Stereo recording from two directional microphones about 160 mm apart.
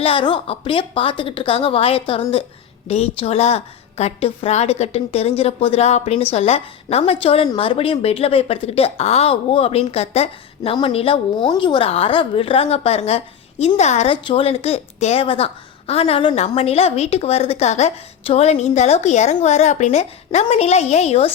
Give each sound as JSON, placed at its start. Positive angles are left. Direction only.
{"t": 0.0, "sound": "a woman's voice", "side_deg": 35}